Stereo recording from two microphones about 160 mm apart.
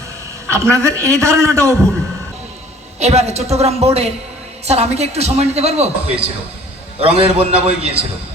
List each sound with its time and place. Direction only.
0.5 s a man's voice: 20° right (ahead or behind)
3.0 s a man's voice: 40° right (ahead or behind)